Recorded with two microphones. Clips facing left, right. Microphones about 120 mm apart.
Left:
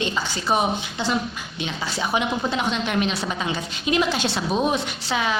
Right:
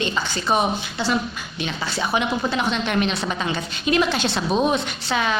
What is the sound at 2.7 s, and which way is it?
A woman's voice, 15° left (ahead or behind).